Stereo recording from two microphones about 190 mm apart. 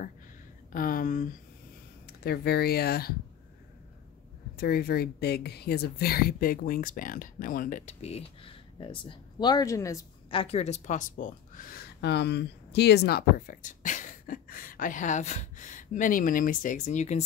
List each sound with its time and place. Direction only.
0.7 s speech: 45° left (ahead or behind)
2.0 s speech: 55° left (ahead or behind)
4.6 s speech: 55° left (ahead or behind); by 9.9 s 15° left (ahead or behind)
10.3 s speech: 30° left (ahead or behind)